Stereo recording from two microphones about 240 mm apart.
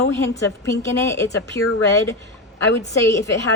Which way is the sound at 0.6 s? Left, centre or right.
Centre.